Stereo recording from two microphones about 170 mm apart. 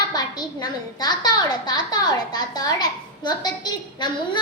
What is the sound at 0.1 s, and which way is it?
A child's voice, 25° left (ahead or behind).